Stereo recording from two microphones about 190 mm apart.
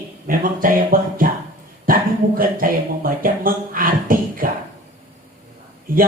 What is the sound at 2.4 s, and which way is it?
Speech, 50° right (ahead or behind).